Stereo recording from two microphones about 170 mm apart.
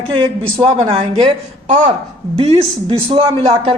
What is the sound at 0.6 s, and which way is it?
Speech, 30° right (ahead or behind).